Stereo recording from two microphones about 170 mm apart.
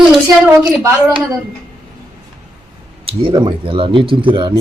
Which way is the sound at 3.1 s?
30° right (ahead or behind).